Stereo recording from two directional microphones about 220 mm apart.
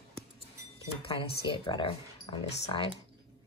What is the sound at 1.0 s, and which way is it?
Speech, 25° left (ahead or behind).